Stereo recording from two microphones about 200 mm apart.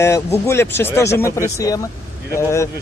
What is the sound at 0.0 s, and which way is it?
Speech, 15° left (ahead or behind).